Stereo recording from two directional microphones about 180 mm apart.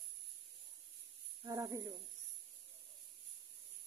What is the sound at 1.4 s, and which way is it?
Speech, 20° right (ahead or behind).